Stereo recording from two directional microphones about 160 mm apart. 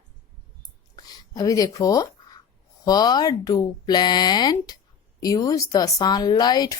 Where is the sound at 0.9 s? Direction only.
25° left (ahead or behind).